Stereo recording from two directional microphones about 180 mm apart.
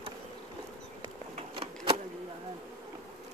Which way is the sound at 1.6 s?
30° right (ahead or behind).